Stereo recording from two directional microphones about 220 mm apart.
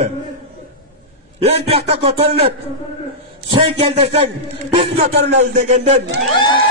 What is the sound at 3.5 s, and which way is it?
A man's voice, 25° right (ahead or behind).